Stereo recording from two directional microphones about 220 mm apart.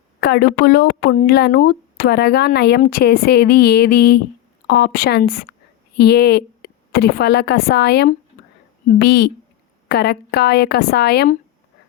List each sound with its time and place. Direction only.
0.2 s a woman's voice: 45° left (ahead or behind)